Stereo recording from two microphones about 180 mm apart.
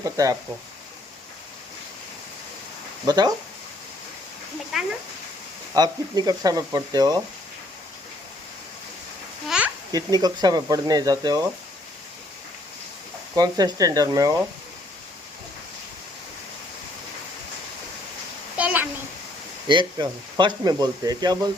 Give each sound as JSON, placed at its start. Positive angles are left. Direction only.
{"t": 0.0, "sound": "speech", "side_deg": -20}
{"t": 3.1, "sound": "speech", "side_deg": -20}
{"t": 5.7, "sound": "speech", "side_deg": -20}
{"t": 9.5, "sound": "a sound", "side_deg": -5}
{"t": 9.9, "sound": "speech", "side_deg": -20}
{"t": 13.3, "sound": "speech", "side_deg": -20}
{"t": 18.5, "sound": "a sound", "side_deg": -10}
{"t": 19.6, "sound": "speech", "side_deg": -25}